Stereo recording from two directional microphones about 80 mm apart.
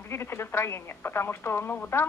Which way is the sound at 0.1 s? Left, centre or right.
Left.